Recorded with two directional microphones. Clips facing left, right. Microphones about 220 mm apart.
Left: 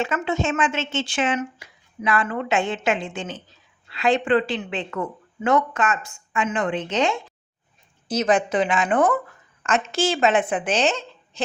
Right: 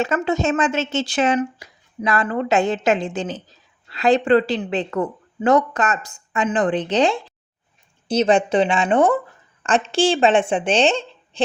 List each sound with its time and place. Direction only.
0.0 s a woman's voice: 40° right (ahead or behind)